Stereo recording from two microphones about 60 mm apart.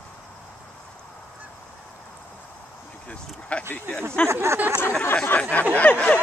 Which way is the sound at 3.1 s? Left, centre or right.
Left.